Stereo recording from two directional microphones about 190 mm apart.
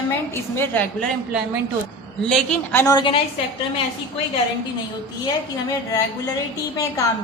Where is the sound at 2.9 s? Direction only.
25° left (ahead or behind).